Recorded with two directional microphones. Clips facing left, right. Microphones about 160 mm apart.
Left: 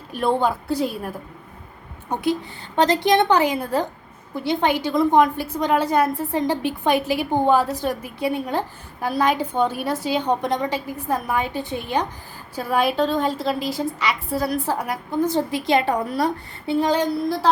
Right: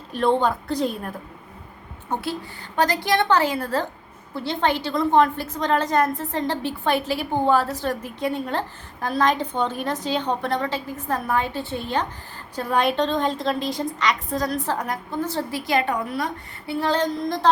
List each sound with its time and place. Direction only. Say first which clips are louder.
0.1 s a woman's voice: even; 10° left (ahead or behind)
2.7 s a woman's voice: left 4 dB; 25° left (ahead or behind)
16.6 s a woman's voice: left 3 dB; 15° left (ahead or behind)